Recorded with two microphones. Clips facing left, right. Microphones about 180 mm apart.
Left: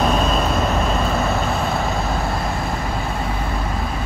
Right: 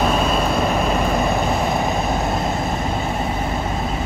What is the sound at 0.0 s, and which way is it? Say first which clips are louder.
Vehicle: even; 10° right (ahead or behind).